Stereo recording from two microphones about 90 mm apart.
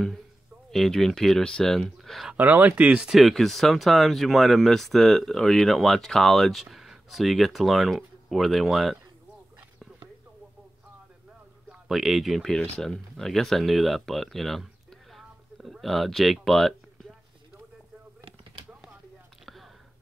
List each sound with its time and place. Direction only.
0.7 s speech: 5° left (ahead or behind)
2.3 s speech: 20° right (ahead or behind); by 9.0 s centre (ahead or behind)
11.7 s speech: centre (ahead or behind)
19.4 s whispering: centre (ahead or behind)